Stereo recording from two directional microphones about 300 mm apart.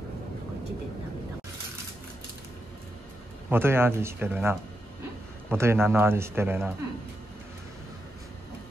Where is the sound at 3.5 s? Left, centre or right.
Centre.